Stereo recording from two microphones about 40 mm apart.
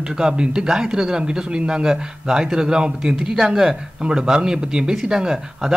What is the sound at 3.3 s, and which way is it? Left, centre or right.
Speech, centre.